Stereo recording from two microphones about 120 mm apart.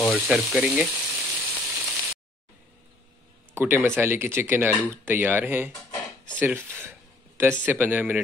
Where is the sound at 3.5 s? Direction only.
20° right (ahead or behind).